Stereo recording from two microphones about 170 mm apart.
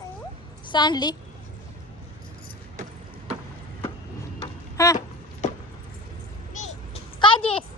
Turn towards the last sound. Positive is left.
turn(degrees=30)  # may be behind; listen again after turning